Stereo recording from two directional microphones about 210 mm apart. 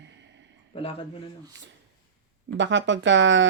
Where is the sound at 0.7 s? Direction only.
25° left (ahead or behind).